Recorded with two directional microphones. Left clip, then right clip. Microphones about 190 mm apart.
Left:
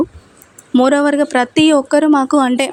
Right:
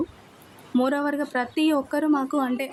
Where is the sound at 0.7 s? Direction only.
40° left (ahead or behind).